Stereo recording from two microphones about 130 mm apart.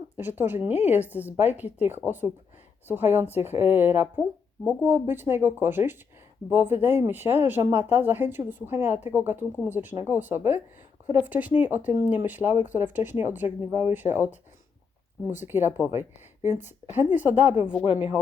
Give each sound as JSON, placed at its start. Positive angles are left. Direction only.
{"t": 0.2, "sound": "speech", "side_deg": -15}
{"t": 12.5, "sound": "speech", "side_deg": 75}
{"t": 12.8, "sound": "speech", "side_deg": -15}
{"t": 15.4, "sound": "speech", "side_deg": -15}